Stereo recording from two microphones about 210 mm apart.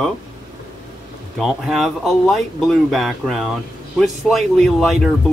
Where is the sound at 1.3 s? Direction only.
Centre (ahead or behind).